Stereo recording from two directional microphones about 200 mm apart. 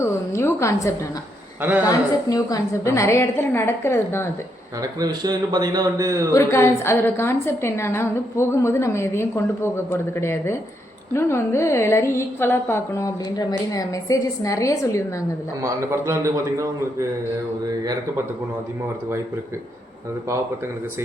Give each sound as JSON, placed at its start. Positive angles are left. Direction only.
{"t": 0.0, "sound": "a sound", "side_deg": 15}
{"t": 1.8, "sound": "a woman's voice", "side_deg": 15}
{"t": 4.8, "sound": "a man's voice", "side_deg": -20}
{"t": 6.3, "sound": "a woman's voice", "side_deg": 15}
{"t": 15.6, "sound": "a man's voice", "side_deg": -15}